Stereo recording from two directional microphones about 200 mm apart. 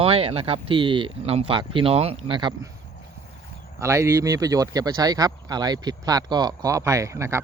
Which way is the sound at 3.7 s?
15° right (ahead or behind).